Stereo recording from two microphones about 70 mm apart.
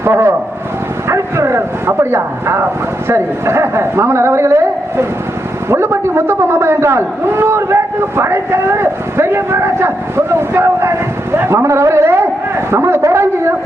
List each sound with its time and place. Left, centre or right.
0.0 s a man's voice: right